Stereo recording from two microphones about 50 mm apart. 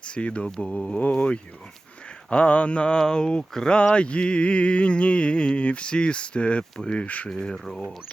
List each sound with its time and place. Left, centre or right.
0.0 s speech: left
0.6 s mantra: left
3.0 s speech: centre
3.8 s mantra: left
7.3 s speech: centre